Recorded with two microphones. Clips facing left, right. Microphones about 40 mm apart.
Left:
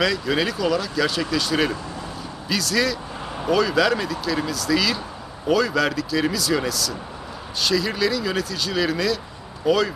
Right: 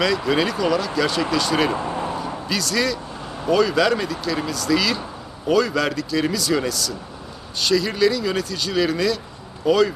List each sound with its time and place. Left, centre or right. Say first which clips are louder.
0.0 s speech: right 2 dB; centre
1.7 s speech: right 7 dB; right
2.5 s speech: left 1 dB; centre